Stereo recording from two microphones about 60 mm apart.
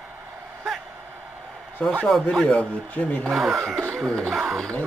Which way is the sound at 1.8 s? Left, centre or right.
Centre.